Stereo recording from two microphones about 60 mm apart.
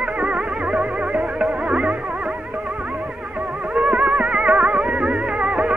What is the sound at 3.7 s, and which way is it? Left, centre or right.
Music, centre.